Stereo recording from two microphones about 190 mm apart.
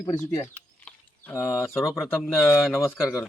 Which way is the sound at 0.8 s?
10° left (ahead or behind).